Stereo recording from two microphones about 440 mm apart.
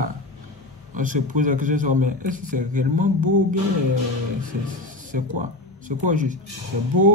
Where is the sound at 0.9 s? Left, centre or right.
Centre.